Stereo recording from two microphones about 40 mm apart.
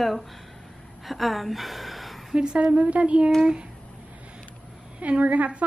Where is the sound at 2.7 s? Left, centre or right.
Right.